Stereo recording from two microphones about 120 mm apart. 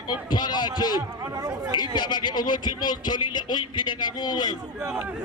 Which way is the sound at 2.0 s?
40° left (ahead or behind).